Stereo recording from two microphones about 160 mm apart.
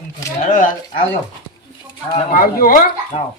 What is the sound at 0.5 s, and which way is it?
Speech, 55° left (ahead or behind).